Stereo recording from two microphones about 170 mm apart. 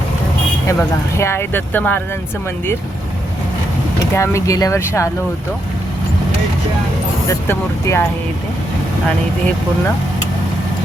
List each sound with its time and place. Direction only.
0.7 s speech: 15° left (ahead or behind)
4.1 s speech: 15° left (ahead or behind)
7.3 s speech: 15° left (ahead or behind)